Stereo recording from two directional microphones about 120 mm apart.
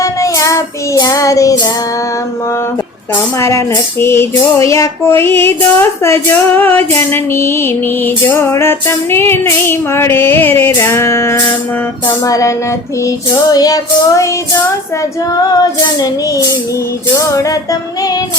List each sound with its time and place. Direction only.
0.0 s child singing: 25° left (ahead or behind)
3.3 s music: 25° left (ahead or behind)
15.3 s female singing: 30° left (ahead or behind)
17.2 s music: 25° left (ahead or behind)